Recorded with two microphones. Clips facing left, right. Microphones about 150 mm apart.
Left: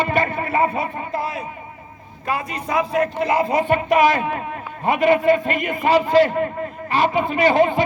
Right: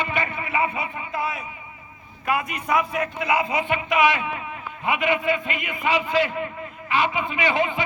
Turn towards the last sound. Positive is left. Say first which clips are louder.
# left 7 dB
turn(degrees=40)  # may be behind; listen again after turning